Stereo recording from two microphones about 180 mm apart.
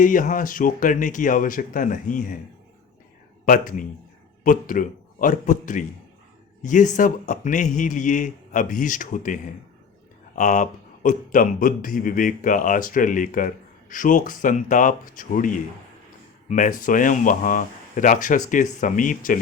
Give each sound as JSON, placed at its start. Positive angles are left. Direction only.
{"t": 0.0, "sound": "speech", "side_deg": 50}
{"t": 3.4, "sound": "speech", "side_deg": 50}